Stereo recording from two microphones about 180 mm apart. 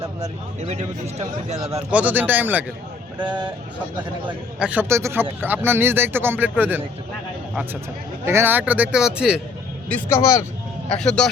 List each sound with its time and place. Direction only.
0.7 s speech: 40° right (ahead or behind)
1.9 s speech: 10° right (ahead or behind)
3.2 s a sound: 25° right (ahead or behind)
4.6 s speech: 10° right (ahead or behind)
9.9 s speech: 15° left (ahead or behind)
11.0 s a man's voice: 5° left (ahead or behind)